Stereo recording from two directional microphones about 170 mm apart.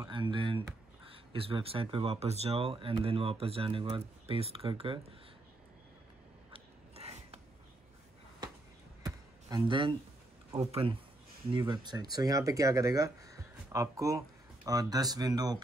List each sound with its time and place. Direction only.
0.1 s speech: 30° right (ahead or behind)
6.5 s a sound: 35° right (ahead or behind)
9.0 s music: 25° right (ahead or behind)
10.7 s speech: 35° right (ahead or behind)